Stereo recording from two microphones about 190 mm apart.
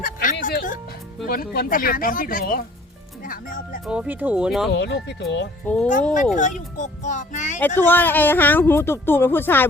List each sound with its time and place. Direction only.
0.0 s music: 45° left (ahead or behind)
1.3 s speech: 50° left (ahead or behind)
3.8 s speech: 5° right (ahead or behind)
4.7 s speech: 65° left (ahead or behind)
5.6 s speech: 5° left (ahead or behind)
6.3 s speech: 40° left (ahead or behind)
7.8 s speech: 10° left (ahead or behind)